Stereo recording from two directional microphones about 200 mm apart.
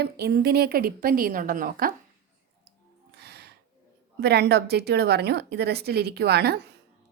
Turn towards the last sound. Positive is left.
turn(degrees=-55)  # may be behind; listen again after turning